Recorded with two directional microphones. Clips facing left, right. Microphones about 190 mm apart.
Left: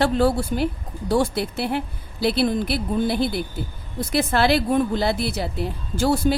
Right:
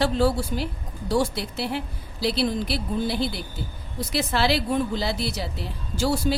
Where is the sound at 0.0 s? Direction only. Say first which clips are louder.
Left 3 dB; 55° left (ahead or behind).